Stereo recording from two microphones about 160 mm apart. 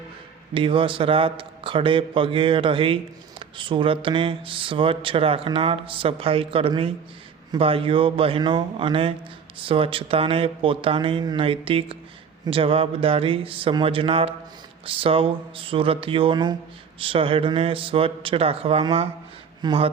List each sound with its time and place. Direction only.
0.5 s speech: 30° right (ahead or behind)